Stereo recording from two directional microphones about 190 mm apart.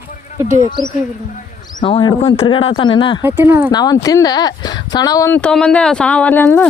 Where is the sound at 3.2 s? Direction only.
10° right (ahead or behind).